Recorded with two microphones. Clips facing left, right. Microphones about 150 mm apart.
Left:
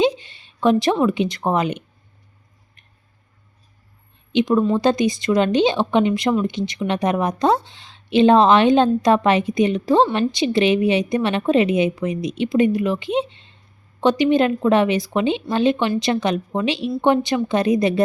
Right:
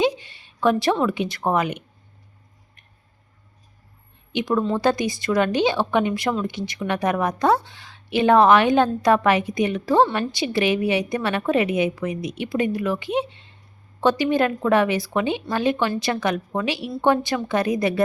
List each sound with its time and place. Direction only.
0.0 s a sound: 20° left (ahead or behind)
1.5 s speech: 20° left (ahead or behind)
4.3 s speech: 20° left (ahead or behind)